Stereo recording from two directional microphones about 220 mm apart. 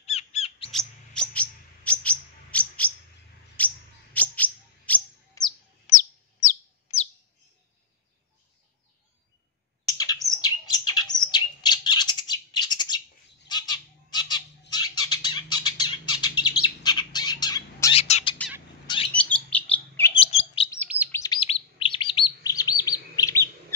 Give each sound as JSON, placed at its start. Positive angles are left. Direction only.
{"t": 0.0, "sound": "squawk", "side_deg": 30}
{"t": 0.7, "sound": "bird", "side_deg": 5}
{"t": 3.6, "sound": "a sound", "side_deg": 5}
{"t": 4.1, "sound": "bird", "side_deg": 5}
{"t": 5.9, "sound": "bird", "side_deg": 35}
{"t": 9.8, "sound": "bird", "side_deg": 15}
{"t": 17.9, "sound": "bird", "side_deg": 30}
{"t": 19.1, "sound": "bird", "side_deg": 5}
{"t": 20.2, "sound": "bird", "side_deg": 25}
{"t": 21.1, "sound": "chirp", "side_deg": 15}